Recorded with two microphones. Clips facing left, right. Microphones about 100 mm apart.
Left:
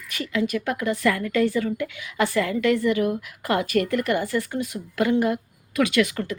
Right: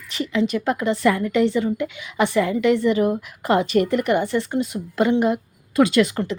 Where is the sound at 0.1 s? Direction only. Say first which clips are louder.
Right 3 dB; 25° right (ahead or behind).